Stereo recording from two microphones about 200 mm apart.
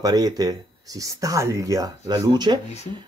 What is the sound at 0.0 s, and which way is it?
Speech, 20° right (ahead or behind).